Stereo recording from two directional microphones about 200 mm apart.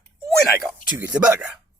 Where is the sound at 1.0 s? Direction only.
15° right (ahead or behind).